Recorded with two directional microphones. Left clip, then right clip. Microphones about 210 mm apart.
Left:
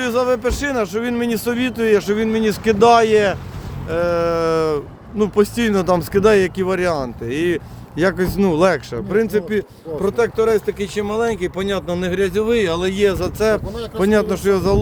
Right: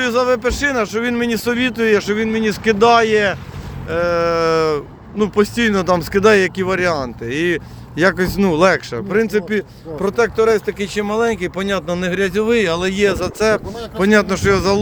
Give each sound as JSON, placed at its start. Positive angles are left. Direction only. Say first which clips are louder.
{"t": 0.0, "sound": "speech", "louder": "right 2 dB", "side_deg": 20}
{"t": 2.1, "sound": "speech", "louder": "even", "side_deg": 30}